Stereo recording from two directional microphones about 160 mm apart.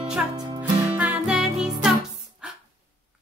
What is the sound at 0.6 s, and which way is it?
Music, 10° right (ahead or behind).